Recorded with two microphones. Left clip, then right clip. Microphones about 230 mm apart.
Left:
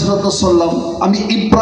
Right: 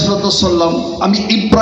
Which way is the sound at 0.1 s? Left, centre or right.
Left.